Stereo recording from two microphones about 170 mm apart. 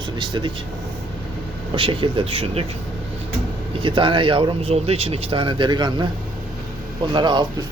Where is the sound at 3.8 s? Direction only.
30° right (ahead or behind).